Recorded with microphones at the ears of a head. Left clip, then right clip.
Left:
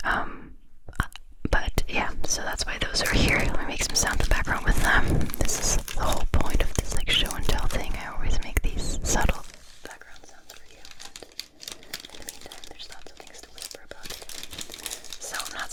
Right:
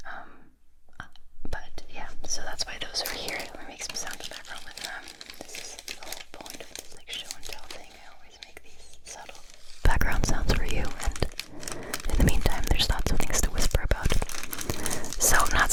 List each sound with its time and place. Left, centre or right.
0.9 s whispering: left
9.8 s whispering: right